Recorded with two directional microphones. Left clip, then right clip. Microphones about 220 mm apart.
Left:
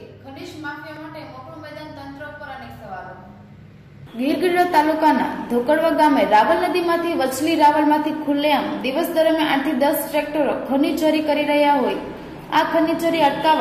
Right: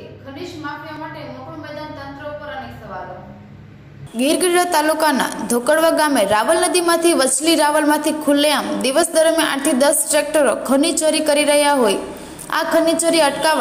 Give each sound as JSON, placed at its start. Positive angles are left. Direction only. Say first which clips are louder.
{"t": 4.2, "sound": "a woman's voice", "louder": "right 2 dB", "side_deg": -35}